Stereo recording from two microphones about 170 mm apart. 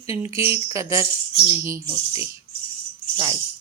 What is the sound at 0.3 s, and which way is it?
A woman's voice, 15° right (ahead or behind).